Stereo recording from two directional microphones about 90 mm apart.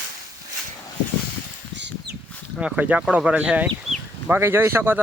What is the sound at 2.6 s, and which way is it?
Speech, 15° right (ahead or behind).